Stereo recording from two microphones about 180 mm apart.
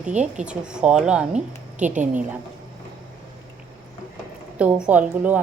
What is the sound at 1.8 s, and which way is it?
Speech, 45° right (ahead or behind).